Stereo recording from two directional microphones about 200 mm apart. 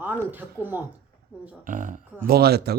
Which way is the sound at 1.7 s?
40° right (ahead or behind).